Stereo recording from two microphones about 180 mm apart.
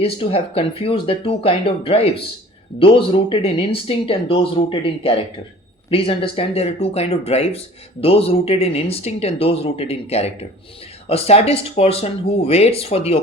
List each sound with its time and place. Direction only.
0.0 s speech: 35° left (ahead or behind)